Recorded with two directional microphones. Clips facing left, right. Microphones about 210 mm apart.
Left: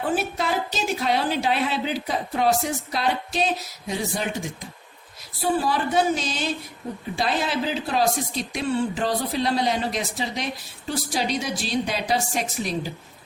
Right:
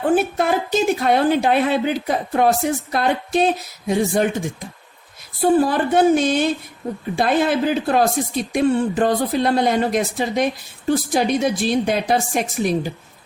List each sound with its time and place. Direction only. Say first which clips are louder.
0.2 s speech: right 6 dB; 55° right (ahead or behind)